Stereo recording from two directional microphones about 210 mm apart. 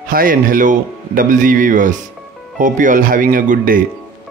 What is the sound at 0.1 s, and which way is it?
Speech, 40° right (ahead or behind).